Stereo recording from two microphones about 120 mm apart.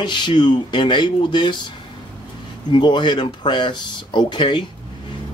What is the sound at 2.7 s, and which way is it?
Speech, 40° left (ahead or behind).